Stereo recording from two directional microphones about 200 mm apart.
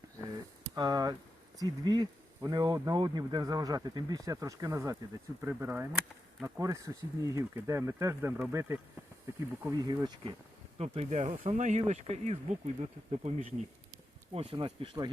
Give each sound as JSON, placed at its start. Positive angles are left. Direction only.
{"t": 0.8, "sound": "speech", "side_deg": -20}
{"t": 10.8, "sound": "speech", "side_deg": -30}